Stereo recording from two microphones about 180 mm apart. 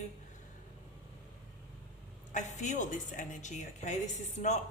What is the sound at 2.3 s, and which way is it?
A woman's voice, 40° left (ahead or behind).